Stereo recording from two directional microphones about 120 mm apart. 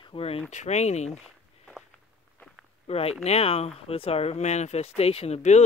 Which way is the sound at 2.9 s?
60° left (ahead or behind).